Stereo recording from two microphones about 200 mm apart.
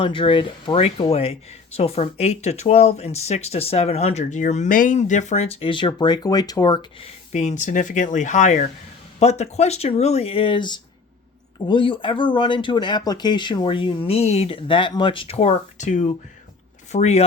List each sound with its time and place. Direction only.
0.0 s speech: 25° left (ahead or behind)
7.3 s speech: 35° left (ahead or behind)